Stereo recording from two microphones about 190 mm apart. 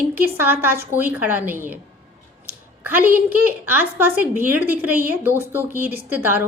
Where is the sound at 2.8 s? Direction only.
10° right (ahead or behind).